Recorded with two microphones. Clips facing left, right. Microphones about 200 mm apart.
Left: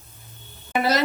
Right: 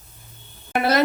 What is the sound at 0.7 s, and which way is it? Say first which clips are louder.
Speech: right 2 dB; 55° right (ahead or behind).